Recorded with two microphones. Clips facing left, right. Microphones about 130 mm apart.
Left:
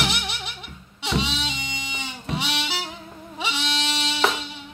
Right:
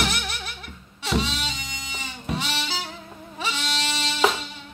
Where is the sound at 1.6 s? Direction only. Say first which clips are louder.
Left 3 dB; 20° left (ahead or behind).